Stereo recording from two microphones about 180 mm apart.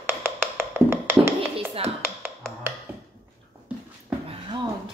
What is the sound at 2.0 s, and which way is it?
Finger snapping, 10° right (ahead or behind).